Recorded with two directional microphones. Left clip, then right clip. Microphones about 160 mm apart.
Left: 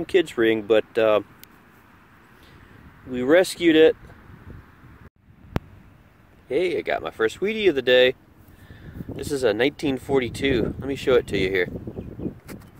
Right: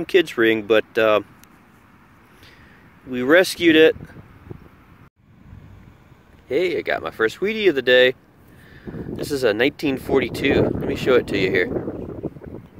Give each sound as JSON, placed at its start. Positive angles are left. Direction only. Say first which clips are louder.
{"t": 0.0, "sound": "speech", "louder": "right 3 dB", "side_deg": 10}
{"t": 3.1, "sound": "speech", "louder": "right 3 dB", "side_deg": 10}
{"t": 6.5, "sound": "speech", "louder": "right 2 dB", "side_deg": 10}